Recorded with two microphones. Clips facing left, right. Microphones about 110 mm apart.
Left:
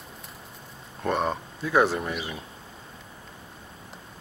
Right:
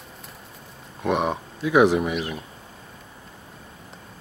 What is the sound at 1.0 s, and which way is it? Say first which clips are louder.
Speech: right 3 dB; 10° right (ahead or behind).